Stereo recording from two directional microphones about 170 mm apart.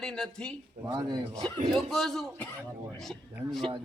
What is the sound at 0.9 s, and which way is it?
Speech, 25° right (ahead or behind).